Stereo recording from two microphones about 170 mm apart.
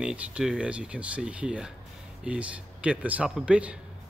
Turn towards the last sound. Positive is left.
turn(degrees=-5)  # may be behind; listen again after turning